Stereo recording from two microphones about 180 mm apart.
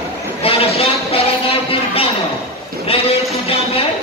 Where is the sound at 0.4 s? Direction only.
30° left (ahead or behind).